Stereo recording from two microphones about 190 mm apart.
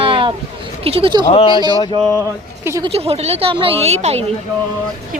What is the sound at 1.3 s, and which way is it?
Speech, 30° left (ahead or behind).